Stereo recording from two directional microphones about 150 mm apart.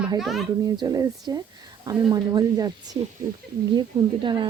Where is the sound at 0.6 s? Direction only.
25° right (ahead or behind).